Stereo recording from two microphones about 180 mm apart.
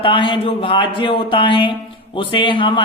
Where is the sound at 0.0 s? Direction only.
25° left (ahead or behind).